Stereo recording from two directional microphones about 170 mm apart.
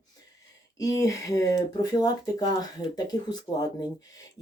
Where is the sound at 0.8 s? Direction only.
20° left (ahead or behind).